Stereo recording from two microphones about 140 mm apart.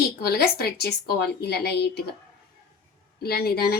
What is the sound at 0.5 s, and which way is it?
Speech, 90° left.